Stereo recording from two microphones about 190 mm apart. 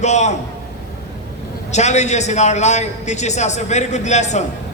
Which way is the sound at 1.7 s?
35° left (ahead or behind).